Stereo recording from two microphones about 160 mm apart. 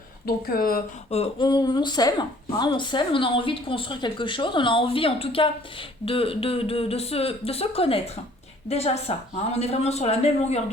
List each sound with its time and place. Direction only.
0.3 s speech: 70° left (ahead or behind)
1.1 s speech: 40° left (ahead or behind)
1.5 s speech: 25° left (ahead or behind); by 10.6 s 40° left (ahead or behind)